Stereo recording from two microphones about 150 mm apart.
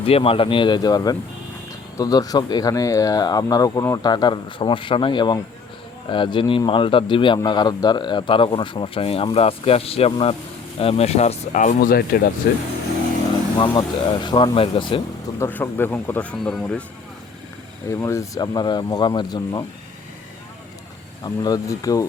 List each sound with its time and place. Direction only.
0.0 s speech: 40° left (ahead or behind); by 12.3 s 80° left
13.6 s speech: 30° left (ahead or behind)
15.4 s speech: 15° left (ahead or behind)
17.8 s speech: 20° left (ahead or behind)
21.2 s speech: 25° left (ahead or behind)